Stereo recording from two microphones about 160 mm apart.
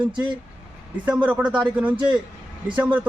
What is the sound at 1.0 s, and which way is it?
Speech, 10° right (ahead or behind).